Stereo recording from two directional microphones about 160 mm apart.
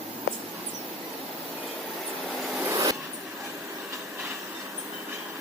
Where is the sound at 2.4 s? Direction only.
Centre (ahead or behind).